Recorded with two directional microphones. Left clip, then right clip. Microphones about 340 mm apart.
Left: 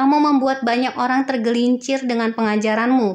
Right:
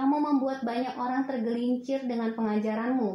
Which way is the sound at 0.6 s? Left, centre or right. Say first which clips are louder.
Left 12 dB; right.